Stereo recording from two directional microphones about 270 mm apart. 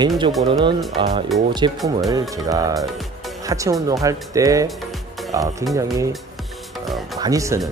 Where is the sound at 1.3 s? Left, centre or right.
Centre.